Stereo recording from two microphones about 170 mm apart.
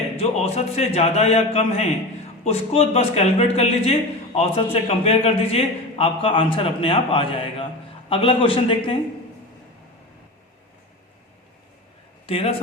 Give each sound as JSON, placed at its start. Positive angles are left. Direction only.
{"t": 0.2, "sound": "a man's voice", "side_deg": 35}
{"t": 12.2, "sound": "a man's voice", "side_deg": 35}